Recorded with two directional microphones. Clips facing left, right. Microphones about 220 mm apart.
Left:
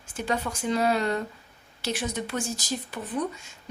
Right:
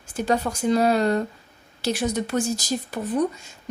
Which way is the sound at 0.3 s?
40° right (ahead or behind).